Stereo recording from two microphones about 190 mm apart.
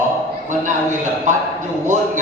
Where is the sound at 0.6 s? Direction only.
40° right (ahead or behind).